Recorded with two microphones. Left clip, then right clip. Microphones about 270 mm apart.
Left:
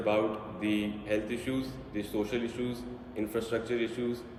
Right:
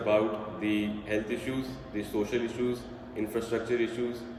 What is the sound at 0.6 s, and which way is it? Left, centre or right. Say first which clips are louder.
A man's voice: right 1 dB; centre.